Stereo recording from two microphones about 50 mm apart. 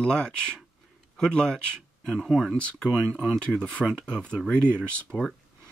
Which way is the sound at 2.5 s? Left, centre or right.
Left.